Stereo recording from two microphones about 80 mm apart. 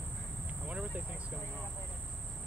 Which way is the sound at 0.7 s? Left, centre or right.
Centre.